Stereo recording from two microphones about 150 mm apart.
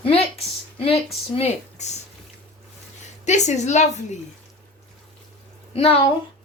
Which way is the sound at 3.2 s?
50° left (ahead or behind).